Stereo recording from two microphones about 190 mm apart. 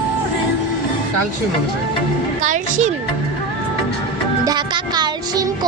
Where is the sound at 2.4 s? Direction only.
40° right (ahead or behind).